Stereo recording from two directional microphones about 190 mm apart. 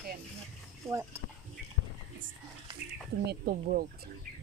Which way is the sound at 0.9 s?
5° left (ahead or behind).